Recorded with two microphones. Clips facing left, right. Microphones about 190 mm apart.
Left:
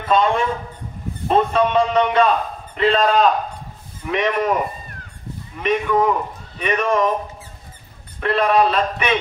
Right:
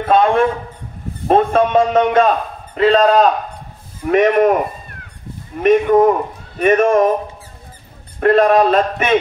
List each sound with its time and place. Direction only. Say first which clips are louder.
0.1 s a man's voice: right 4 dB; 55° right (ahead or behind)
5.6 s a man's voice: right 8 dB; 45° right (ahead or behind)
8.2 s a man's voice: right 6 dB; 45° right (ahead or behind)